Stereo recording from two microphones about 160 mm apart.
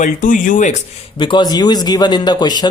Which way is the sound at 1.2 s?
30° left (ahead or behind).